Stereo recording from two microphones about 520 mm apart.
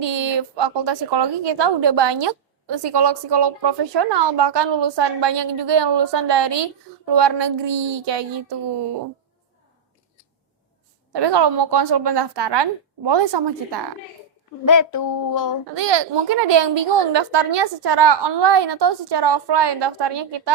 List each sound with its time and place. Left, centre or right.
0.0 s a woman's voice: right
11.1 s a woman's voice: right
14.6 s a sound: left
15.7 s a woman's voice: right